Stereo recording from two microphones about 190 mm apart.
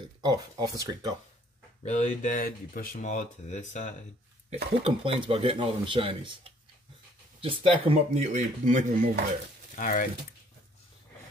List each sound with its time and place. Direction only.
0.2 s speech: 20° right (ahead or behind)
1.8 s speech: 40° left (ahead or behind)
4.8 s speech: 30° right (ahead or behind); by 9.2 s 45° right (ahead or behind)
9.8 s speech: 45° left (ahead or behind)